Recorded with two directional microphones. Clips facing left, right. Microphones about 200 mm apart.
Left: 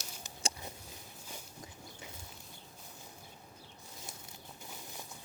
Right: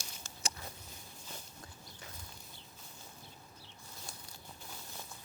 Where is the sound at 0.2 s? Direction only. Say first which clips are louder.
Left 3 dB; 15° left (ahead or behind).